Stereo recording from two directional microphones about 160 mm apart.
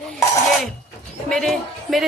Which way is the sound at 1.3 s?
5° left (ahead or behind).